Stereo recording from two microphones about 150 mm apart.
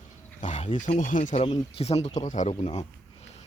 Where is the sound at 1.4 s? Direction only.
45° left (ahead or behind).